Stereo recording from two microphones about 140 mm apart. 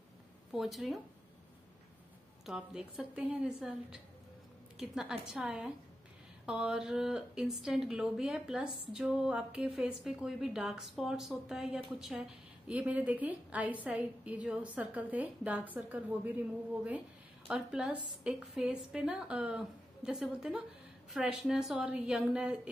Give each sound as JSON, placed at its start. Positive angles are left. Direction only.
{"t": 0.5, "sound": "a woman's voice", "side_deg": 0}
{"t": 2.4, "sound": "a woman's voice", "side_deg": -5}
{"t": 17.5, "sound": "a woman's voice", "side_deg": -5}